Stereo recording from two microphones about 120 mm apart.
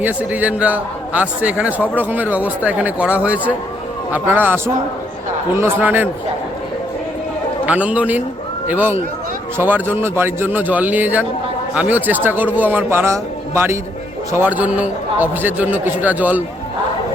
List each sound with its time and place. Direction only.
0.0 s a man's voice: 10° right (ahead or behind)
7.6 s a man's voice: 10° right (ahead or behind)